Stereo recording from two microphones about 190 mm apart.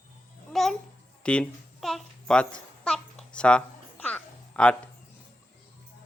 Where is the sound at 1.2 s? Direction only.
5° left (ahead or behind).